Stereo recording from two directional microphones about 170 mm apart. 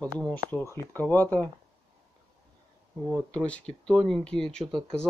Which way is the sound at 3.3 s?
5° left (ahead or behind).